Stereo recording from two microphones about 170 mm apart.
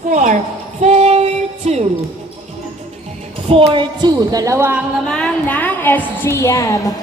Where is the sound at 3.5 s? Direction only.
35° right (ahead or behind); by 4.8 s 10° right (ahead or behind).